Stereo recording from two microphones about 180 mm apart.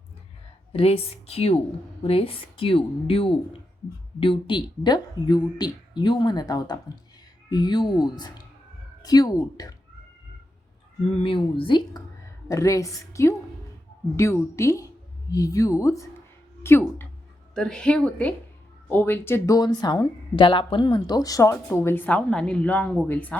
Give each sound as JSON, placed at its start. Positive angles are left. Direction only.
{"t": 0.7, "sound": "a woman's voice", "side_deg": 35}
{"t": 11.2, "sound": "a woman's voice", "side_deg": 30}